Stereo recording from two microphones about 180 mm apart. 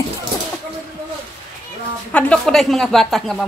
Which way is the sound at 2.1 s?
5° left (ahead or behind).